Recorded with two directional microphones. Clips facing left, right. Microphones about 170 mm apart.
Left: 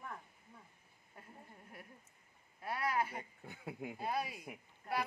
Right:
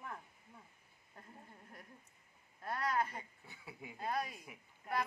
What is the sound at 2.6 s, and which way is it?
Speech, 10° left (ahead or behind).